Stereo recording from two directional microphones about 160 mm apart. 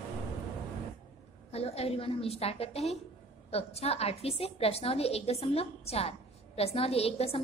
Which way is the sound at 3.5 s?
40° left (ahead or behind).